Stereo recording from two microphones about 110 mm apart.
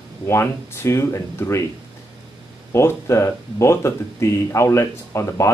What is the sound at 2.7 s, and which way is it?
Speech, 25° left (ahead or behind).